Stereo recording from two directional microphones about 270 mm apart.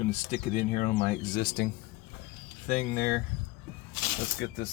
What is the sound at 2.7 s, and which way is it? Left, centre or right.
Speech, left.